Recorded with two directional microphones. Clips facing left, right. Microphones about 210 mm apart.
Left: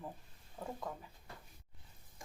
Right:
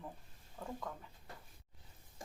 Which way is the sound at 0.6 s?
15° left (ahead or behind).